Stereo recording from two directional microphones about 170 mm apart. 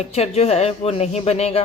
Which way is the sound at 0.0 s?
40° left (ahead or behind).